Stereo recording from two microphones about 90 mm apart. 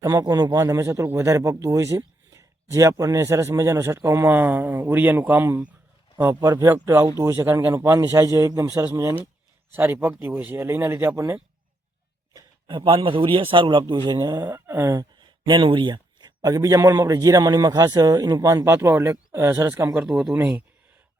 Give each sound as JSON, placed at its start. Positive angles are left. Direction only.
{"t": 0.0, "sound": "a man's voice", "side_deg": -40}
{"t": 4.3, "sound": "speech", "side_deg": -20}
{"t": 6.8, "sound": "a man's voice", "side_deg": -30}
{"t": 12.6, "sound": "a man's voice", "side_deg": -60}
{"t": 14.9, "sound": "a sound", "side_deg": -55}
{"t": 16.4, "sound": "a man's voice", "side_deg": -40}
{"t": 19.9, "sound": "speech", "side_deg": -10}